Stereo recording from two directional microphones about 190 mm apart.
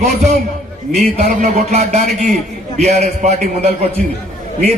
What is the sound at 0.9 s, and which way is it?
A man's voice, 35° right (ahead or behind).